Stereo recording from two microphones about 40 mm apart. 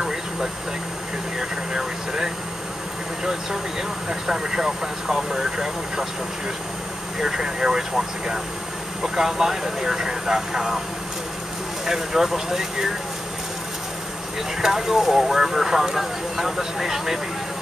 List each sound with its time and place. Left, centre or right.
0.0 s air conditioning: centre
1.7 s speech: centre
4.1 s speech: centre
7.2 s speech: centre
9.0 s speech: centre
11.8 s speech: centre
14.6 s speech: centre